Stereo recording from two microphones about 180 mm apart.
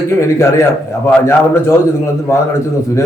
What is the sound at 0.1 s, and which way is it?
A man's voice, 15° left (ahead or behind).